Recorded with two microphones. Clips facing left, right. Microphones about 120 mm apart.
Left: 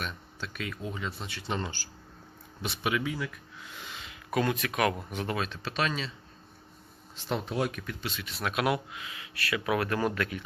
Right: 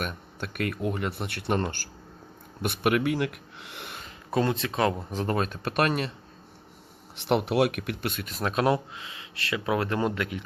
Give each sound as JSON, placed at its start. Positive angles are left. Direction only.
{"t": 0.0, "sound": "speech", "side_deg": -55}
{"t": 4.3, "sound": "speech", "side_deg": -30}
{"t": 7.2, "sound": "speech", "side_deg": -70}